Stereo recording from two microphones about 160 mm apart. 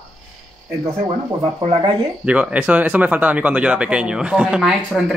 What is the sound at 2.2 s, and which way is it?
Speech, 10° right (ahead or behind).